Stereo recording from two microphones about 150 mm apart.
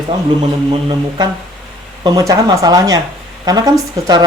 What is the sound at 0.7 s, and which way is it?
Speech, 35° right (ahead or behind).